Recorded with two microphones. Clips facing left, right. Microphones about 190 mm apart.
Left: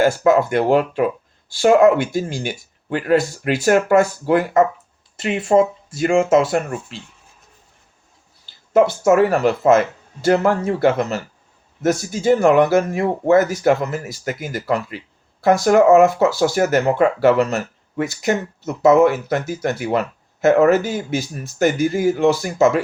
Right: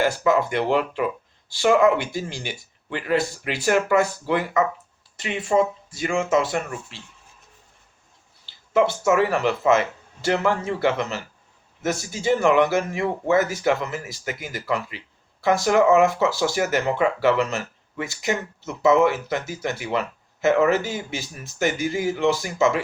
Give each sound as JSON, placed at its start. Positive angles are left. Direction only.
{"t": 0.0, "sound": "speech", "side_deg": 45}
{"t": 8.4, "sound": "speech", "side_deg": 45}